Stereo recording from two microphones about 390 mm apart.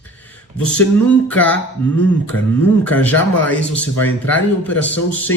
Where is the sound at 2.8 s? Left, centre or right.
Centre.